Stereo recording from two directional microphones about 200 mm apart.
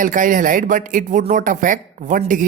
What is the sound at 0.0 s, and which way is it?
Speech, 40° right (ahead or behind).